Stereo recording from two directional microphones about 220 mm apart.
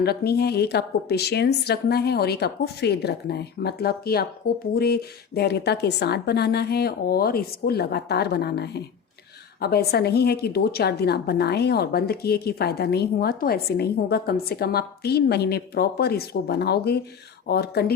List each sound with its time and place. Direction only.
0.0 s a woman's voice: 45° left (ahead or behind)